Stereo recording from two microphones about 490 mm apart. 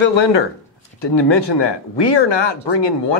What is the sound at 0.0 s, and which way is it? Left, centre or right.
Speech, left.